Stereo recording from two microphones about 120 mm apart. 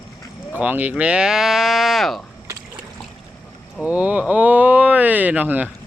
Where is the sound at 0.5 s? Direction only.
15° right (ahead or behind).